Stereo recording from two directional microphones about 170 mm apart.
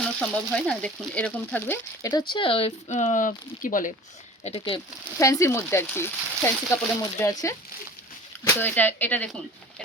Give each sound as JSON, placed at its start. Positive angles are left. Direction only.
{"t": 0.2, "sound": "speech", "side_deg": 5}
{"t": 2.3, "sound": "speech", "side_deg": 30}
{"t": 4.4, "sound": "speech", "side_deg": 30}
{"t": 5.2, "sound": "speech", "side_deg": 15}
{"t": 8.6, "sound": "speech", "side_deg": 10}